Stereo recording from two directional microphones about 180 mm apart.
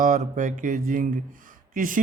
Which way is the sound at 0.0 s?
45° right (ahead or behind).